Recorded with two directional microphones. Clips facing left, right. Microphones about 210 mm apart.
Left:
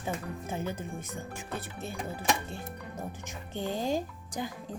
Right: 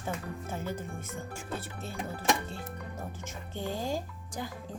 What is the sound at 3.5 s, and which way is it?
Speech, 20° left (ahead or behind).